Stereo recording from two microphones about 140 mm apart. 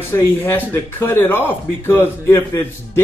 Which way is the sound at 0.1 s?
25° left (ahead or behind).